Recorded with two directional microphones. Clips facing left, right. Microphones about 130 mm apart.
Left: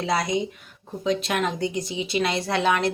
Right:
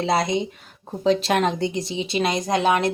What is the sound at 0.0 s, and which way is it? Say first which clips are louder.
A woman's voice: right 3 dB; 25° right (ahead or behind).